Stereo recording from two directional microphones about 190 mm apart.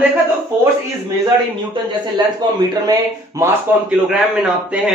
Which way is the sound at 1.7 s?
25° right (ahead or behind).